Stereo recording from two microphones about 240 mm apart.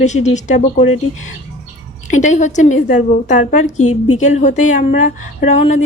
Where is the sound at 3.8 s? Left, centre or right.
Left.